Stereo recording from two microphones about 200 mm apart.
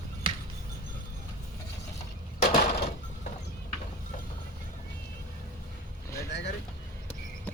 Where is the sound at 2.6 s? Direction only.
55° left (ahead or behind).